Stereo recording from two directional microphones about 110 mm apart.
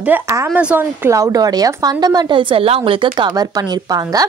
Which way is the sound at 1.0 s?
30° right (ahead or behind).